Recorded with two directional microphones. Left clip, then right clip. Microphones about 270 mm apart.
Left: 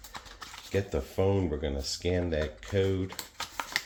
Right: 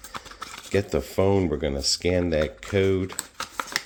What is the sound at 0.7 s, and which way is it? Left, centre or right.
Speech, right.